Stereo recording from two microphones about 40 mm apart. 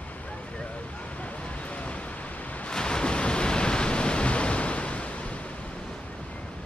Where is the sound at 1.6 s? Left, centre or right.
Left.